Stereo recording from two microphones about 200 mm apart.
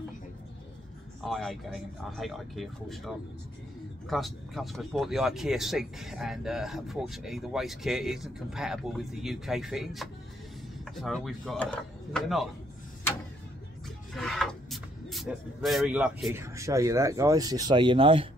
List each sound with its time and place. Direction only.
1.2 s speech: centre (ahead or behind)
14.1 s speech: centre (ahead or behind)
16.3 s speech: 15° right (ahead or behind)